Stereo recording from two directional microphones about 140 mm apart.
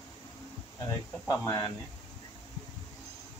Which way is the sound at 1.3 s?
25° left (ahead or behind).